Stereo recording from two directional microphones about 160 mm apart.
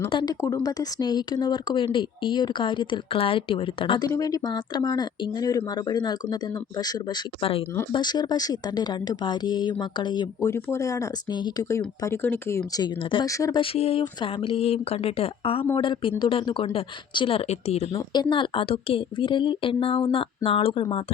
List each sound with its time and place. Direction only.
0.1 s speech: 30° left (ahead or behind)
12.0 s speech: 15° left (ahead or behind)
12.7 s speech: 30° left (ahead or behind)
13.3 s speech: 20° left (ahead or behind)
13.6 s speech: 35° left (ahead or behind)
17.9 s speech: 25° left (ahead or behind)